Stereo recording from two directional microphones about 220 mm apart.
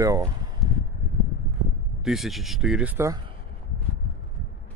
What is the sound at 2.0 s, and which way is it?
Speech, centre (ahead or behind).